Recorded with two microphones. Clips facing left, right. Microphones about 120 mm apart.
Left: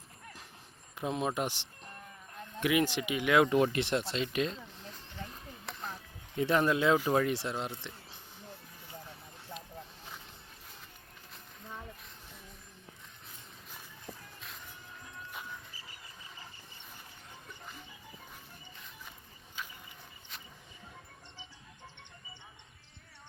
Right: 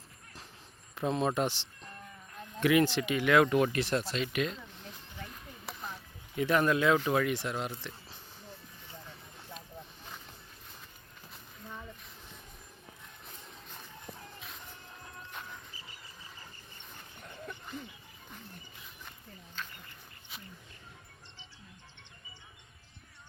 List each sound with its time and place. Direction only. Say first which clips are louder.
0.9 s speech: right 3 dB; 10° left (ahead or behind); by 4.5 s 30° left (ahead or behind)
5.6 s chop: even; centre (ahead or behind)
6.3 s speech: right 1 dB; 30° left (ahead or behind)
7.1 s speech: even; 35° left (ahead or behind)
14.1 s music: left 1 dB; 15° right (ahead or behind)
17.2 s a sound: right 10 dB; 65° right (ahead or behind)
19.6 s duck: even; 10° left (ahead or behind)